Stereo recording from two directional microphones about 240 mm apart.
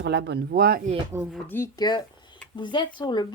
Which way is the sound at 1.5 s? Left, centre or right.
Centre.